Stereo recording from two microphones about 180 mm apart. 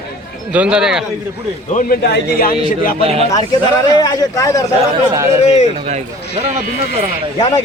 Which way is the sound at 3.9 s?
20° left (ahead or behind).